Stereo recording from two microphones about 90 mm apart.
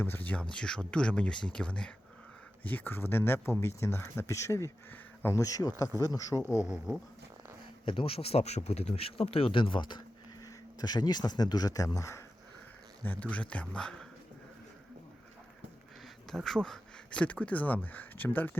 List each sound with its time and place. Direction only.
0.0 s speech: 20° left (ahead or behind)
4.9 s a sound: 25° left (ahead or behind)
5.4 s speech: 40° left (ahead or behind)
7.9 s speech: 85° left; by 10.0 s 65° left (ahead or behind)
10.4 s speech: 50° left (ahead or behind)
13.1 s speech: 15° left (ahead or behind)
16.3 s speech: 5° left (ahead or behind); by 18.6 s 20° left (ahead or behind)